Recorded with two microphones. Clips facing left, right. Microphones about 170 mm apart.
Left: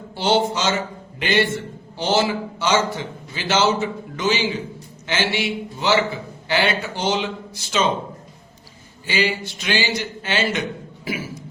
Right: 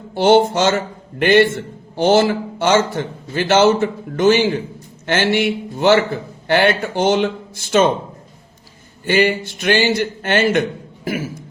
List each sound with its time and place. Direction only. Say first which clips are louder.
0.1 s a man's voice: right 7 dB; 55° right (ahead or behind)
9.0 s a man's voice: right 7 dB; 55° right (ahead or behind)